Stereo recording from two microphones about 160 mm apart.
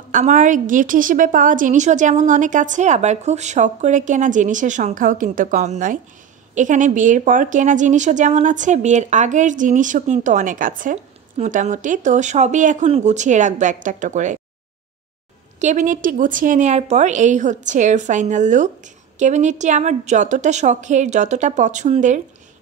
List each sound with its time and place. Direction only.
0.1 s a woman's voice: 55° right (ahead or behind)
11.3 s a woman's voice: 45° right (ahead or behind)
15.6 s a woman's voice: 50° right (ahead or behind)